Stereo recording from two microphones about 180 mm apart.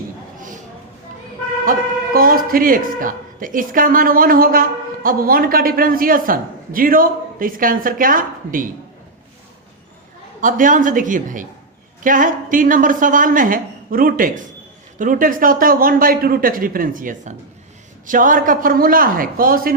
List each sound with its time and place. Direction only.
1.7 s a man's voice: 50° right (ahead or behind)
10.4 s a man's voice: 45° right (ahead or behind)